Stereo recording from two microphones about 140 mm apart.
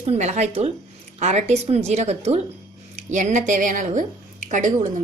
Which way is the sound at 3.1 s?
60° right (ahead or behind).